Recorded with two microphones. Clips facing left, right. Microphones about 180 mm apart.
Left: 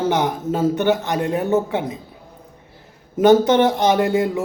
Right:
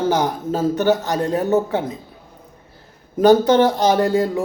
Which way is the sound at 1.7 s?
20° left (ahead or behind).